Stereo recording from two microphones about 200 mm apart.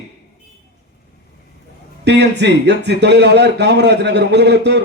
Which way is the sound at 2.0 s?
60° right (ahead or behind).